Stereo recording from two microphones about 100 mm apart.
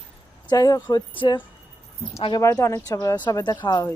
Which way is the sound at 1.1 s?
50° left (ahead or behind).